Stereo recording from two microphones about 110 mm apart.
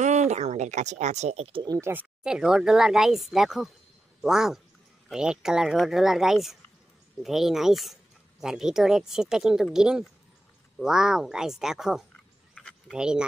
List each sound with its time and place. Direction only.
0.0 s a sound: 90° right; by 1.6 s 65° right (ahead or behind)
1.8 s speech: 20° right (ahead or behind)
2.2 s speech: 5° right (ahead or behind)